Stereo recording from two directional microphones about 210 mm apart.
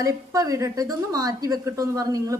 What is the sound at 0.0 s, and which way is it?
A woman's voice, 15° right (ahead or behind).